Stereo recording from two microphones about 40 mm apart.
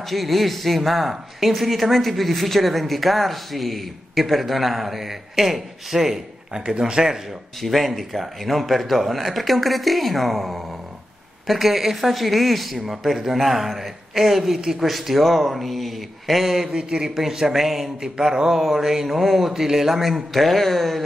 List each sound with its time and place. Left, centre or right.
0.1 s speech: centre
6.6 s speech: right
7.6 s a man's voice: centre
14.9 s speech: centre
16.7 s a man's voice: right
18.1 s a man's voice: centre